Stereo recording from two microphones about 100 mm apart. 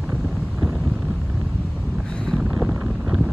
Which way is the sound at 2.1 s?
10° left (ahead or behind).